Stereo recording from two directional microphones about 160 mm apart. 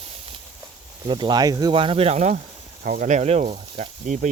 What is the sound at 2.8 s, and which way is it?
Speech, 55° right (ahead or behind).